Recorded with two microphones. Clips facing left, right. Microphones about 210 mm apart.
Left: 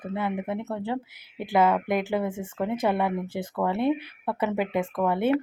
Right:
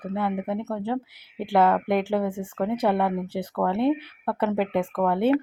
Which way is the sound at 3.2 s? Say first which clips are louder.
Right 2 dB; 45° left (ahead or behind).